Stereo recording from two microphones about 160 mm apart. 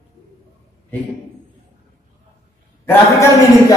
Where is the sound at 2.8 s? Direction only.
20° left (ahead or behind).